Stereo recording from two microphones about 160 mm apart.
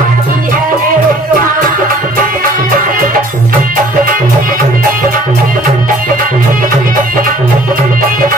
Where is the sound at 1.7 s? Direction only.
55° right (ahead or behind).